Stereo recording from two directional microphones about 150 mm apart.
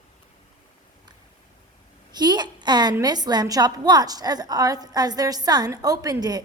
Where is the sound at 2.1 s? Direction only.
30° right (ahead or behind).